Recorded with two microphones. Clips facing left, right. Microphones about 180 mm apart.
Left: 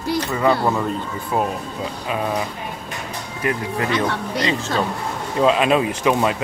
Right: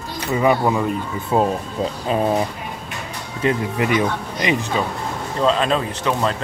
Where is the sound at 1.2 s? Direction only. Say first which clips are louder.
Right 4 dB; 25° right (ahead or behind).